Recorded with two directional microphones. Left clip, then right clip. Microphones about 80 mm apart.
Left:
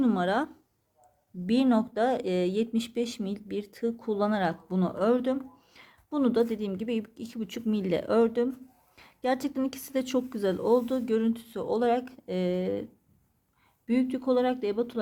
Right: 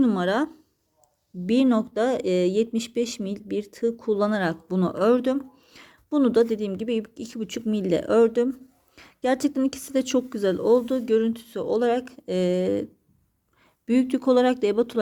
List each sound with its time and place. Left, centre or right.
0.0 s speech: right
4.8 s speech: right
13.8 s speech: right